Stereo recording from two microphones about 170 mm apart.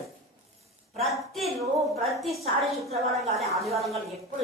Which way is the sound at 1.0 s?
Centre (ahead or behind).